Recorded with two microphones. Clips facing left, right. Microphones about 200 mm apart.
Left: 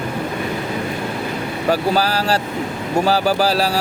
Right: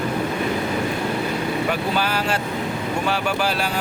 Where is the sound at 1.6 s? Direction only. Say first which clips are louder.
Left 5 dB; 35° left (ahead or behind).